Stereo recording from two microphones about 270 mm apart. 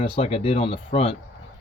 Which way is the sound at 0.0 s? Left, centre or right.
Centre.